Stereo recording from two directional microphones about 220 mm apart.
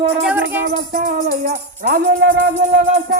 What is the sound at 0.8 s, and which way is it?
Music, 40° right (ahead or behind).